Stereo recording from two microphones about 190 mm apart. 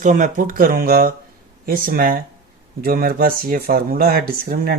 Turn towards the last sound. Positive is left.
turn(degrees=-50)  # may be behind; listen again after turning